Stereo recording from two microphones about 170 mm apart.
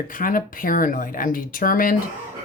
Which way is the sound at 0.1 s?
55° left (ahead or behind).